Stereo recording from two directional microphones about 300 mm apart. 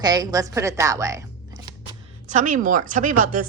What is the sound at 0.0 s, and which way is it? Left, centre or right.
A woman's voice, centre.